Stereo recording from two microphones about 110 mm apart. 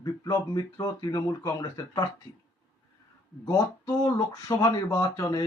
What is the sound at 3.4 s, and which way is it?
A man's voice, 35° left (ahead or behind).